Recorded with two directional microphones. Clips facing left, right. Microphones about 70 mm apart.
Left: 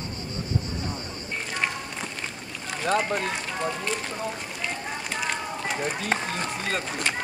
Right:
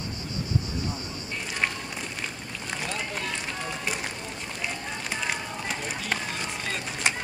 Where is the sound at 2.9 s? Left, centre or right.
Left.